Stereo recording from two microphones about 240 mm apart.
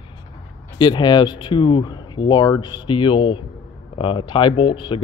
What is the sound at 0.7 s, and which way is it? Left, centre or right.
Speech, centre.